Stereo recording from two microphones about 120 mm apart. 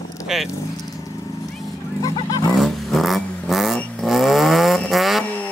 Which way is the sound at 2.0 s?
35° left (ahead or behind).